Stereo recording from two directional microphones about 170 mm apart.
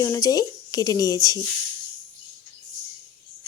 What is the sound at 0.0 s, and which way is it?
Speech, 20° left (ahead or behind).